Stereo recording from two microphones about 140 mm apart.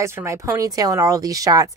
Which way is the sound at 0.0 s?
20° right (ahead or behind).